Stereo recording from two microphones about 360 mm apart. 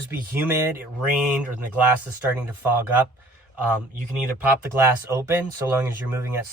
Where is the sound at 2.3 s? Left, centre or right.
Centre.